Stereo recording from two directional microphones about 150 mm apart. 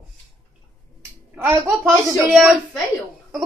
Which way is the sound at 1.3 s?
15° right (ahead or behind).